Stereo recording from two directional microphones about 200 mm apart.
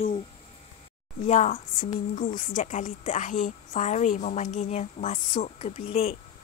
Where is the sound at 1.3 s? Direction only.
35° left (ahead or behind).